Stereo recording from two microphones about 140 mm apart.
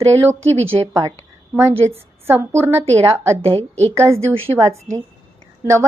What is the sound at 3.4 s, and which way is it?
Speech, 45° right (ahead or behind).